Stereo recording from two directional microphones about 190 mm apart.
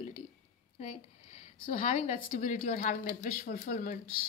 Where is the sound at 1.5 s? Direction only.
40° left (ahead or behind).